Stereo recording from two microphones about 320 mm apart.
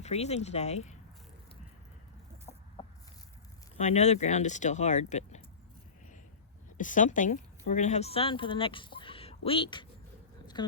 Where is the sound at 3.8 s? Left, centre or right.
Left.